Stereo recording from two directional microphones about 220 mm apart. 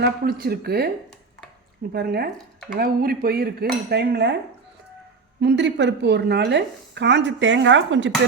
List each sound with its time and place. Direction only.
0.0 s speech: 45° right (ahead or behind)
1.9 s speech: 45° right (ahead or behind)
5.4 s speech: 55° right (ahead or behind)